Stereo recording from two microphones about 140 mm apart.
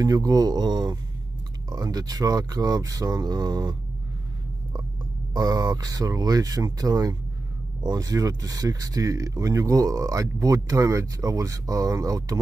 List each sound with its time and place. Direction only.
0.0 s speech: 25° right (ahead or behind)
5.3 s speech: 25° right (ahead or behind)